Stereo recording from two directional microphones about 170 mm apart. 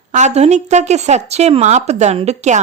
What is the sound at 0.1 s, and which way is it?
A woman's voice, 40° right (ahead or behind).